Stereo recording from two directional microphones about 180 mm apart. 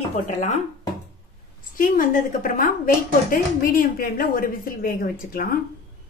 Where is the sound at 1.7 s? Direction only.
50° left (ahead or behind).